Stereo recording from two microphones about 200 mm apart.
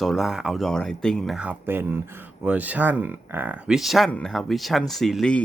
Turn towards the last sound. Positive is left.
turn(degrees=5)  # may be behind; listen again after turning